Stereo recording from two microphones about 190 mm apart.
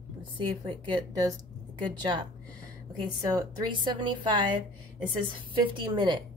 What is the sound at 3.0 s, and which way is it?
A woman's voice, 20° right (ahead or behind).